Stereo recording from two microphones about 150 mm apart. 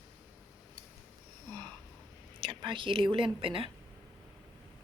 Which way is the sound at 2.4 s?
35° right (ahead or behind).